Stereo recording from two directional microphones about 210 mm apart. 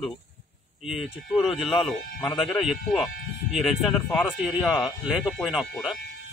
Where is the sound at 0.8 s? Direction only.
Centre (ahead or behind).